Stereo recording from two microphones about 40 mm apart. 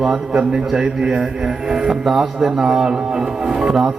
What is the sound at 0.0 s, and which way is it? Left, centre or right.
A man's voice, centre.